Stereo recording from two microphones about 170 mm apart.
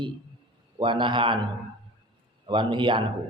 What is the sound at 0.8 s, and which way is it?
Speech, 30° right (ahead or behind).